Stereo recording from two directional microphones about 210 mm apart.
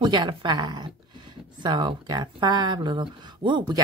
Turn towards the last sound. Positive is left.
turn(degrees=-20)  # may be behind; listen again after turning